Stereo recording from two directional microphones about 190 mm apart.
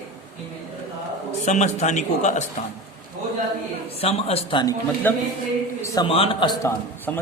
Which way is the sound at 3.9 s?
30° left (ahead or behind).